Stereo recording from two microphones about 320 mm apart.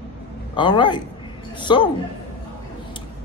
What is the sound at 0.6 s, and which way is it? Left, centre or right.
Speech, centre.